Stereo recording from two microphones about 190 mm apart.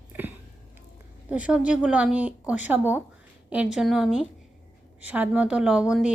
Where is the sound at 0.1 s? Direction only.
10° right (ahead or behind).